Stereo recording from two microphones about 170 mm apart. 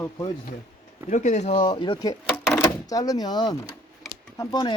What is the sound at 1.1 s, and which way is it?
Speech, 45° left (ahead or behind).